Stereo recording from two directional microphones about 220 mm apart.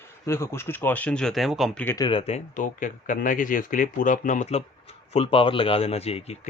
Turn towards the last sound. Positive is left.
turn(degrees=30)  # may be behind; listen again after turning